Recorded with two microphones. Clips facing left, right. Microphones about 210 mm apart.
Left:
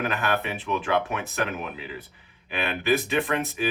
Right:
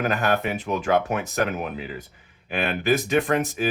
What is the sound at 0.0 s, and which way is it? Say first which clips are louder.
Speech: right 4 dB; 40° right (ahead or behind).